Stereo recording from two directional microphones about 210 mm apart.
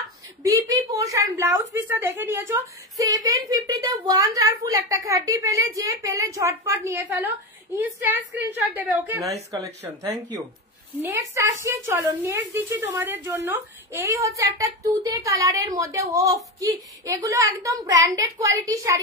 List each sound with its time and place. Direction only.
0.4 s a woman's voice: 15° right (ahead or behind)
11.0 s a woman's voice: 10° right (ahead or behind)